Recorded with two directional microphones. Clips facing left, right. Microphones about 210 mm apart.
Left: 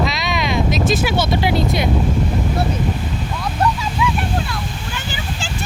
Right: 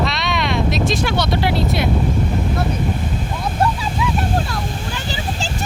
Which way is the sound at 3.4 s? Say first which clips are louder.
Even; 30° right (ahead or behind).